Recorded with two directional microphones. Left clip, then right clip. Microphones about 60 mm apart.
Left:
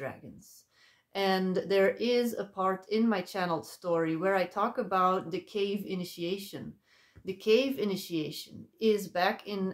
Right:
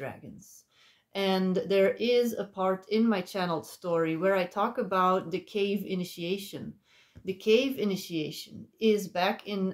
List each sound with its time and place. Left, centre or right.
1.1 s speech: left